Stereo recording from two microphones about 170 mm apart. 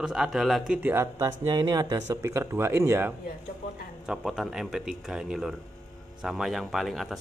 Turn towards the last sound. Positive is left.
turn(degrees=0)  # may be behind; listen again after turning